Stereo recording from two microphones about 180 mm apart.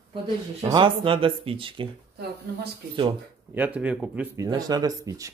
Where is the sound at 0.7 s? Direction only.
30° right (ahead or behind).